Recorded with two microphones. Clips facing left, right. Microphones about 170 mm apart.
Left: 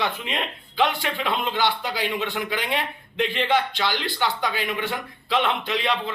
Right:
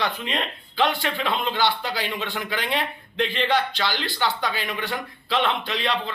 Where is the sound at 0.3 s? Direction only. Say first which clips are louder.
Right 1 dB; 5° left (ahead or behind).